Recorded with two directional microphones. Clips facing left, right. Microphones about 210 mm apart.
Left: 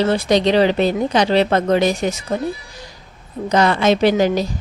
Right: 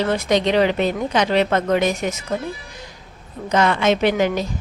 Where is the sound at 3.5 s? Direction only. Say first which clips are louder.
Left 2 dB; 35° left (ahead or behind).